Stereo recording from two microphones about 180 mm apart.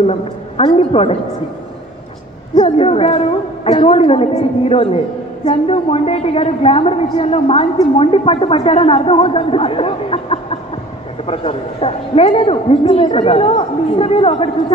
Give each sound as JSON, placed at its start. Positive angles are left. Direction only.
{"t": 0.0, "sound": "a woman's voice", "side_deg": 35}
{"t": 2.5, "sound": "a woman's voice", "side_deg": 35}